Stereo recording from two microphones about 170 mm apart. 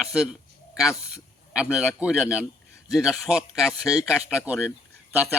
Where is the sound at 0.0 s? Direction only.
5° right (ahead or behind).